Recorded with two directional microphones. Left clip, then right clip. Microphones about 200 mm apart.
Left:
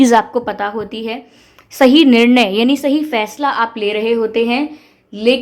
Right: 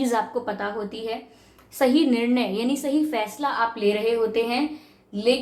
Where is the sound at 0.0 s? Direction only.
50° left (ahead or behind).